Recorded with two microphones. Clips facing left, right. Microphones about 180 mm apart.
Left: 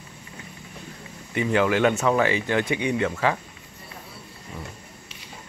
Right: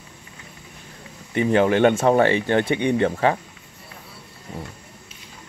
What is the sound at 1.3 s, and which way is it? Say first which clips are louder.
Speech: right 4 dB; 30° right (ahead or behind).